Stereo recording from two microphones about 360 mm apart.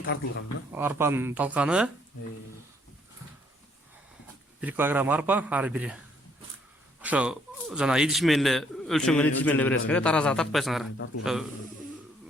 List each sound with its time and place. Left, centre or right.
0.7 s a man's voice: centre
4.6 s a man's voice: centre
7.0 s a man's voice: centre
10.9 s speech: left
11.2 s a man's voice: centre